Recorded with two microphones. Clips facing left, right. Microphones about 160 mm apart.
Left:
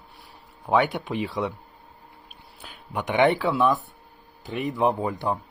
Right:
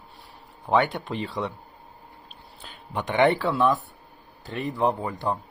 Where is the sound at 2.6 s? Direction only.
5° left (ahead or behind).